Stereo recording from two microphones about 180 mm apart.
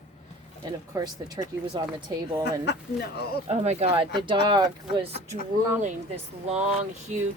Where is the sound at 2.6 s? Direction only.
65° left (ahead or behind).